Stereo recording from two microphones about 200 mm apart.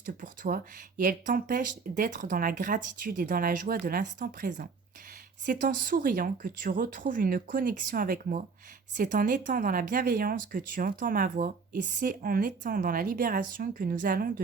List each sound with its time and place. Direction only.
0.0 s speech: 45° right (ahead or behind)